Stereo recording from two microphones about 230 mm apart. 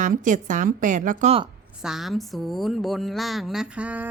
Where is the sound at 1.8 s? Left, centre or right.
Centre.